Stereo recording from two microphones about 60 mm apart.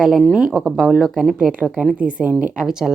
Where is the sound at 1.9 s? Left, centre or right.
Right.